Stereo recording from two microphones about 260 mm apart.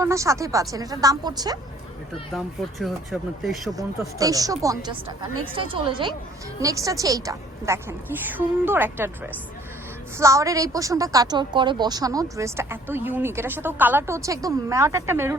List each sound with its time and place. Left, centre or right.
0.0 s a woman's voice: centre
2.3 s speech: centre
4.2 s a woman's voice: centre